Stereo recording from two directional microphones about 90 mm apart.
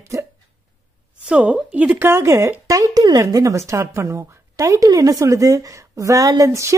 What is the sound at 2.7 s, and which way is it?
Speech, 45° right (ahead or behind).